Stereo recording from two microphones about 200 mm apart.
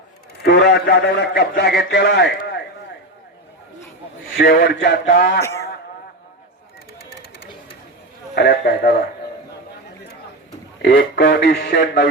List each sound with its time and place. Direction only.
0.4 s a man's voice: 55° left (ahead or behind)
4.4 s a man's voice: 50° left (ahead or behind)
8.4 s a man's voice: 55° left (ahead or behind)
10.8 s speech: 55° left (ahead or behind)